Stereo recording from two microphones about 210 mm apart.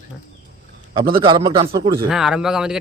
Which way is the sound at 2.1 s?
Centre (ahead or behind).